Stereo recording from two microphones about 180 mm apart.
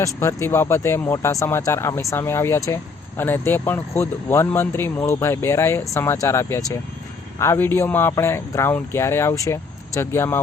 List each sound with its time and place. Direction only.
0.0 s speech: 15° left (ahead or behind)